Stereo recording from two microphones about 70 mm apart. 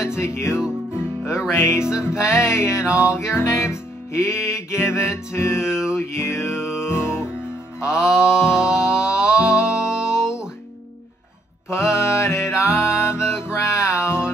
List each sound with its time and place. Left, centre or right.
0.0 s music: left
1.9 s music: centre
2.2 s music: left
2.8 s music: centre
3.2 s music: left
6.6 s music: centre
8.0 s a sound: centre
9.1 s music: centre
10.0 s music: left
11.7 s music: left